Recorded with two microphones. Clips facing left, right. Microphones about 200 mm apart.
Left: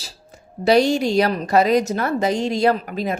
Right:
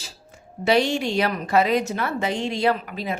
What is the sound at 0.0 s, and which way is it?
A woman's voice, 40° left (ahead or behind).